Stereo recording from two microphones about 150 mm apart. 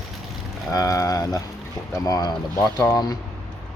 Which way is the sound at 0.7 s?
25° left (ahead or behind).